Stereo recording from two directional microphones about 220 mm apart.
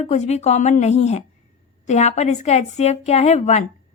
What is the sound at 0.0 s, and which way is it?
A woman's voice, 30° left (ahead or behind).